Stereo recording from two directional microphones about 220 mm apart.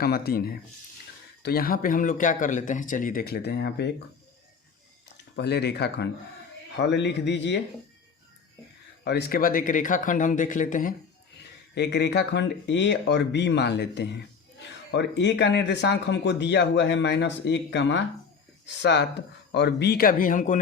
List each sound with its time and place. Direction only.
0.0 s speech: 45° left (ahead or behind)
5.4 s speech: 50° left (ahead or behind)
9.0 s speech: 45° left (ahead or behind)
11.7 s speech: 50° left (ahead or behind)